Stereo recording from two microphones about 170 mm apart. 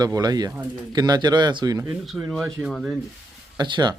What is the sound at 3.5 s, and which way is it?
Speech, 25° right (ahead or behind).